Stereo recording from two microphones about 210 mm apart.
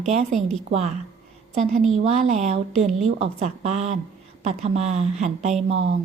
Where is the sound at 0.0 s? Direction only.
30° right (ahead or behind).